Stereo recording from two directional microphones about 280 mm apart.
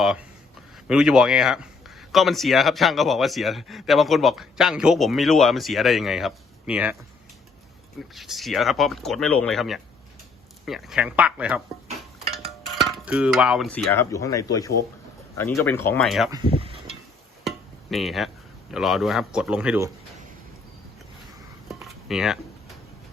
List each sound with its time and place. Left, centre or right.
0.0 s speech: centre
8.1 s speech: centre
12.8 s cutlery: centre
13.9 s speech: centre
16.6 s a sound: centre
17.9 s speech: centre
21.7 s a sound: centre